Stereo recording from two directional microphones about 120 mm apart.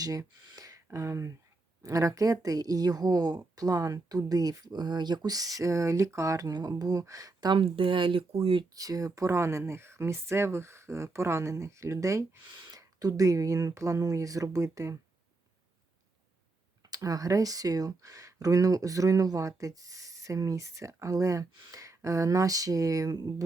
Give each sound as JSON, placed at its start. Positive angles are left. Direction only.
{"t": 0.0, "sound": "a woman's voice", "side_deg": -30}
{"t": 8.7, "sound": "speech", "side_deg": -30}
{"t": 16.9, "sound": "speech", "side_deg": -30}